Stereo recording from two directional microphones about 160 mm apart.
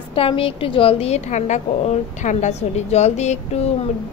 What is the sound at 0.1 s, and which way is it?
A woman's voice, 35° left (ahead or behind).